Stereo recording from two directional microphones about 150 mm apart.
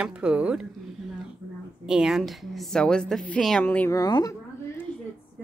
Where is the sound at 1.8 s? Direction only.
5° right (ahead or behind); by 4.0 s 10° left (ahead or behind).